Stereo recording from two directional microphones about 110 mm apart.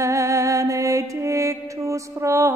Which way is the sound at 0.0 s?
30° right (ahead or behind).